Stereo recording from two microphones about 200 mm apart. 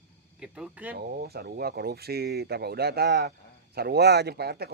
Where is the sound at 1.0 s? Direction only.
50° right (ahead or behind).